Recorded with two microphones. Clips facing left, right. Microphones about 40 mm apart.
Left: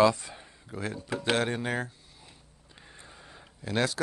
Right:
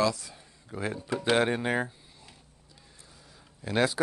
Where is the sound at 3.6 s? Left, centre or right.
Centre.